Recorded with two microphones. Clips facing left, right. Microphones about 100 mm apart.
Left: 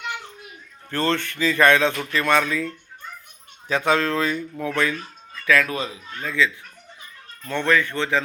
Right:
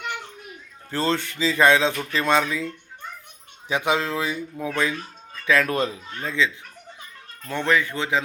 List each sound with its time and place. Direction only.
0.9 s speech: 15° right (ahead or behind)
5.6 s a child's voice: 50° right (ahead or behind)
6.1 s a child's voice: 25° right (ahead or behind)
7.4 s speech: 15° right (ahead or behind)